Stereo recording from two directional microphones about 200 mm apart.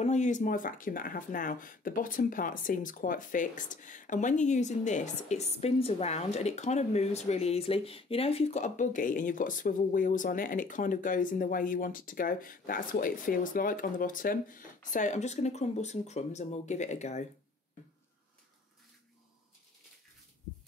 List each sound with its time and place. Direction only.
0.0 s speech: 35° left (ahead or behind)